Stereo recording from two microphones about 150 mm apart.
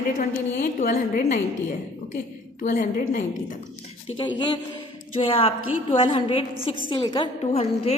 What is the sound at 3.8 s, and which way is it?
Speech, 35° left (ahead or behind).